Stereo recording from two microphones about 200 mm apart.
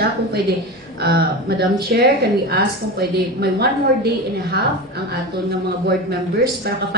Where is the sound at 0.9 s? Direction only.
50° right (ahead or behind).